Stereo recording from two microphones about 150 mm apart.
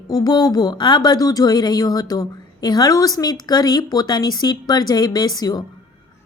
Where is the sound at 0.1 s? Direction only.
25° left (ahead or behind).